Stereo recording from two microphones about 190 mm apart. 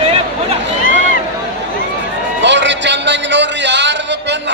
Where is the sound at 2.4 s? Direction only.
70° right (ahead or behind).